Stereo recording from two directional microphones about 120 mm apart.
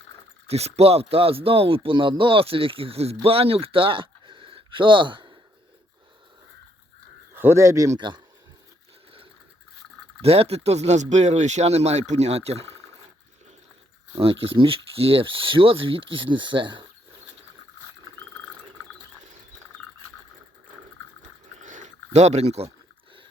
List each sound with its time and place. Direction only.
0.4 s speech: 60° right (ahead or behind); by 5.4 s 40° right (ahead or behind)
7.3 s speech: 20° right (ahead or behind)
7.9 s speech: 40° right (ahead or behind)
10.2 s speech: 55° right (ahead or behind)
12.6 s a sound: 20° left (ahead or behind)
14.2 s speech: 50° right (ahead or behind)
21.6 s a sound: 90° right; by 22.7 s 60° right (ahead or behind)